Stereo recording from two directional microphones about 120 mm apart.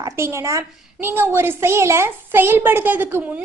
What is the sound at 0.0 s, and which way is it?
A woman's voice, 25° right (ahead or behind).